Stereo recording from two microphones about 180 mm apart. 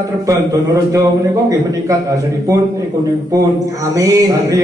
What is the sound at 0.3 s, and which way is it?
A man's voice, 15° right (ahead or behind).